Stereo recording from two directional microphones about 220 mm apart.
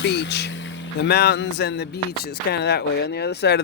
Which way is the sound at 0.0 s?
50° left (ahead or behind).